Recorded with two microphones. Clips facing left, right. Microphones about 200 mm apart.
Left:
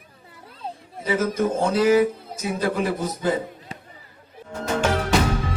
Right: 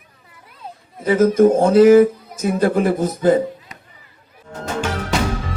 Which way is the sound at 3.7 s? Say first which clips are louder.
Left 4 dB; 30° left (ahead or behind).